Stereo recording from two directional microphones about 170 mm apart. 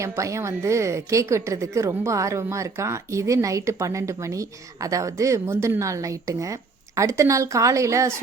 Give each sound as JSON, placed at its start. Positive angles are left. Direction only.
{"t": 0.0, "sound": "a woman's voice", "side_deg": -15}